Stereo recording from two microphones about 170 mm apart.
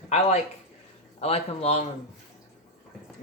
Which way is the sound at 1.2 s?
35° left (ahead or behind).